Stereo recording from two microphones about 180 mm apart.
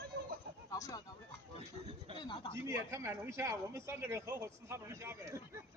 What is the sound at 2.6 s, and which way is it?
A man's voice, 15° right (ahead or behind).